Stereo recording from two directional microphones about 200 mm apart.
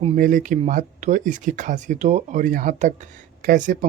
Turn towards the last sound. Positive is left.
turn(degrees=-40)  # may be behind; listen again after turning